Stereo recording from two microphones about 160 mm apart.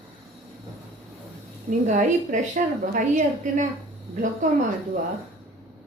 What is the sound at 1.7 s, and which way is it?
A woman's voice, 50° right (ahead or behind).